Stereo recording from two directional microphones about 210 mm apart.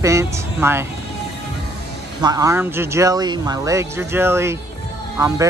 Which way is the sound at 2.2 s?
15° right (ahead or behind).